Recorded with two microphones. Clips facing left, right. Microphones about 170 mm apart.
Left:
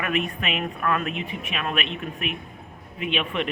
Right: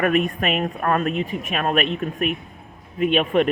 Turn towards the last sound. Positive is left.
turn(degrees=-45)  # may be behind; listen again after turning